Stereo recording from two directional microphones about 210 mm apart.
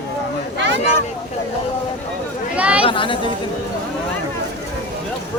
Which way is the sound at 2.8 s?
25° left (ahead or behind).